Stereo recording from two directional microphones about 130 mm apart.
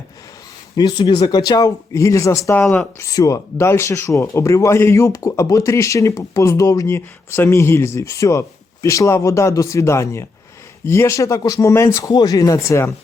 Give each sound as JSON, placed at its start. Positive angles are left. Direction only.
{"t": 0.8, "sound": "speech", "side_deg": 35}